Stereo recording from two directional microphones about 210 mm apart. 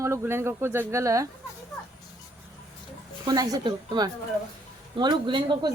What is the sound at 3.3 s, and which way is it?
A woman's voice, 20° right (ahead or behind).